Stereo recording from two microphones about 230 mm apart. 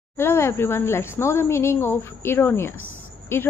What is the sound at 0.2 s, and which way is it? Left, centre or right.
Speech, centre.